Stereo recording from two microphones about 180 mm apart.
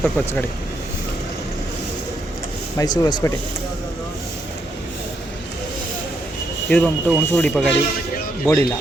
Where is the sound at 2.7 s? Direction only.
20° left (ahead or behind).